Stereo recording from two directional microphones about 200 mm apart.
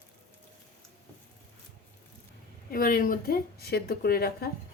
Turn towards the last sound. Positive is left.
turn(degrees=50)  # may be behind; listen again after turning